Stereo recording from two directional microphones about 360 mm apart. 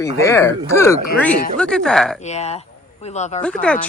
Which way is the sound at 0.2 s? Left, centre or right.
Centre.